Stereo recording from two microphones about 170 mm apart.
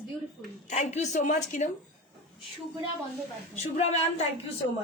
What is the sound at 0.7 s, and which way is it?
A woman's voice, 40° left (ahead or behind).